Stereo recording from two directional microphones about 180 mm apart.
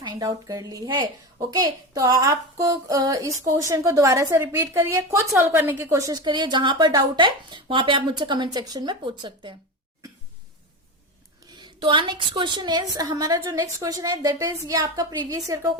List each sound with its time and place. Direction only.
0.0 s speech: 20° right (ahead or behind)
11.5 s speech: 25° right (ahead or behind)